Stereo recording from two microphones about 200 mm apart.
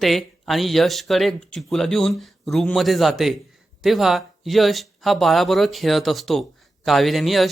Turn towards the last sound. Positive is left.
turn(degrees=0)  # may be behind; listen again after turning